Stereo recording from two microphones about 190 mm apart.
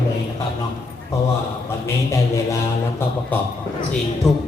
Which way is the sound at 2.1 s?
15° left (ahead or behind).